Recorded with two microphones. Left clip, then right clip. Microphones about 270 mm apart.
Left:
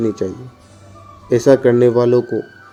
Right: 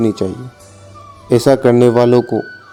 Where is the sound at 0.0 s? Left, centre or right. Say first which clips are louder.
Right 3 dB; right.